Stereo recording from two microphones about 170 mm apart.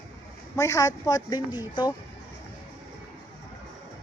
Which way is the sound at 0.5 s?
20° left (ahead or behind).